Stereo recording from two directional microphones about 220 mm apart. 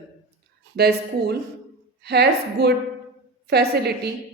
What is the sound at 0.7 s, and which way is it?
A woman's voice, 45° right (ahead or behind).